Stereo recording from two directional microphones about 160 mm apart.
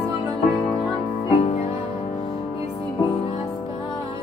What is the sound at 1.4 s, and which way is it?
Music, 45° left (ahead or behind).